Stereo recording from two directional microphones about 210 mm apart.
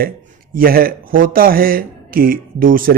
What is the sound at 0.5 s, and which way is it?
Speech, 45° right (ahead or behind).